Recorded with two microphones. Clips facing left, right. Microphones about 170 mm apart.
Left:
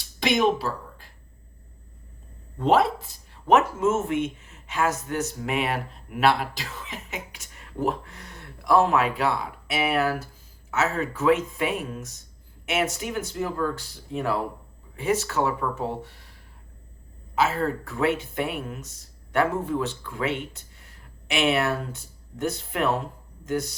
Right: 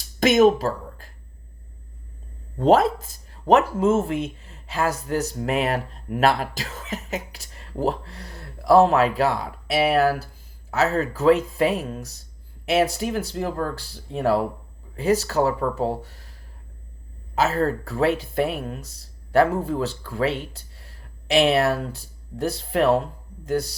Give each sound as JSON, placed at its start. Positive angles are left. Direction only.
{"t": 0.2, "sound": "a sound", "side_deg": -45}
{"t": 2.6, "sound": "speech", "side_deg": -40}
{"t": 17.3, "sound": "speech", "side_deg": -40}